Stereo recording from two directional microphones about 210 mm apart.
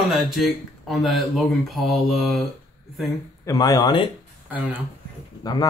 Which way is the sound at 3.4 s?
15° left (ahead or behind).